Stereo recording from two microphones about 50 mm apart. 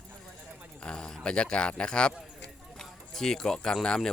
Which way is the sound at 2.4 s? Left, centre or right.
Centre.